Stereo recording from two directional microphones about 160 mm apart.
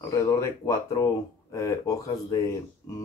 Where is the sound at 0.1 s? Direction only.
20° left (ahead or behind).